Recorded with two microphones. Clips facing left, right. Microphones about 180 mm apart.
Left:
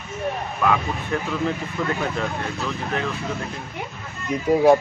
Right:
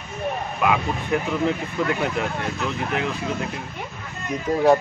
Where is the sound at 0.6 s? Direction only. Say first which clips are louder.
Even; 15° right (ahead or behind).